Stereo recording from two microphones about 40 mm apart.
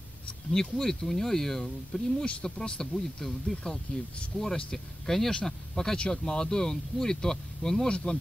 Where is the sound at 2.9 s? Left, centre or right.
Centre.